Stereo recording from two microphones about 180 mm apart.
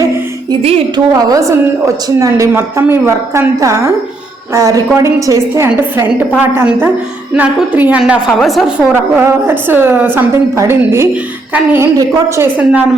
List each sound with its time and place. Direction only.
0.6 s a woman's voice: 35° right (ahead or behind)
1.1 s a woman's voice: 20° right (ahead or behind)